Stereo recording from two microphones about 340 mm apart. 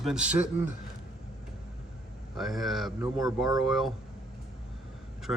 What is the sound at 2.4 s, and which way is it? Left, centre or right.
Speech, centre.